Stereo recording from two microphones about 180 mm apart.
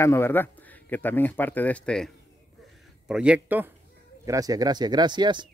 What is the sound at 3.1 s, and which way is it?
Speech, 5° right (ahead or behind).